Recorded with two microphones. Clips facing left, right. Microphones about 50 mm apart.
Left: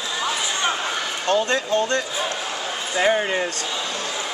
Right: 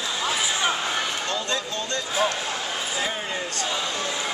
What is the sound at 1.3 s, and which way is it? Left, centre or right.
Speech, left.